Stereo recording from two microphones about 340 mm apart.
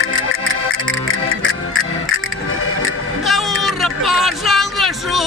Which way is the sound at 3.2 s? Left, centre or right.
Centre.